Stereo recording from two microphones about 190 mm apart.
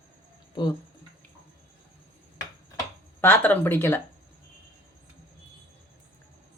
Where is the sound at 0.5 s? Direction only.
25° left (ahead or behind).